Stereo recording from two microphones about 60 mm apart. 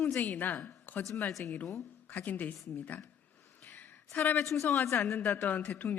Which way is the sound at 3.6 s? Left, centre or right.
Left.